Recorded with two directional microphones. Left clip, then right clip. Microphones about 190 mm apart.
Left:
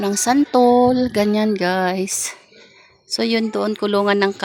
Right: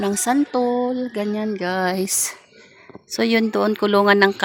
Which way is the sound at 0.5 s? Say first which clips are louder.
Left 7 dB; 25° left (ahead or behind).